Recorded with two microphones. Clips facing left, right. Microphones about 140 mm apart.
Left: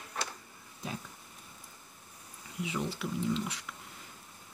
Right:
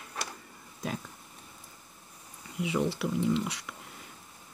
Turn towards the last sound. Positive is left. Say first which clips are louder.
# right 4 dB
turn(degrees=-70)  # may be behind; listen again after turning